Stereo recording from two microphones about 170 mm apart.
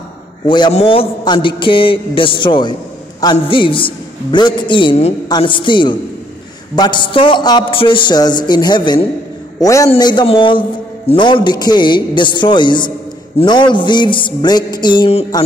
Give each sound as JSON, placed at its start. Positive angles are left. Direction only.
{"t": 0.5, "sound": "a woman's voice", "side_deg": 35}